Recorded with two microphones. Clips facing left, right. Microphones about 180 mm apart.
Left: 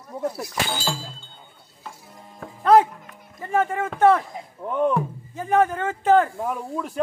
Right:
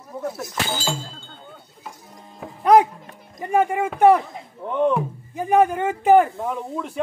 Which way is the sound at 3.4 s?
15° right (ahead or behind).